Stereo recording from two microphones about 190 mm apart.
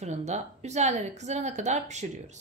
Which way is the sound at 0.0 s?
35° right (ahead or behind).